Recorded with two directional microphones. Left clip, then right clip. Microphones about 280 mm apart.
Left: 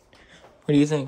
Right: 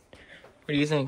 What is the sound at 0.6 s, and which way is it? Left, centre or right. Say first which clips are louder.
Speech: left 5 dB; centre.